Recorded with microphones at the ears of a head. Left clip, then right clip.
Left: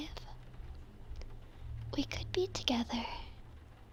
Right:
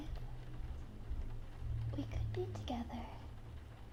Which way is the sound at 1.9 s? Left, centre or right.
Left.